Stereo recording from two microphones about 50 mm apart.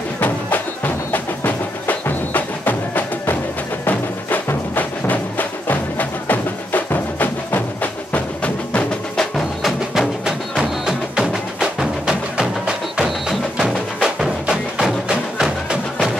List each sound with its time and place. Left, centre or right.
1.1 s music: left
4.7 s music: left
9.1 s wood block: centre
9.6 s music: centre
13.3 s music: centre